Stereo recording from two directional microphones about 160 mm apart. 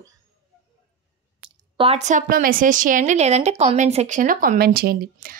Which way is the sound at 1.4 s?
35° right (ahead or behind).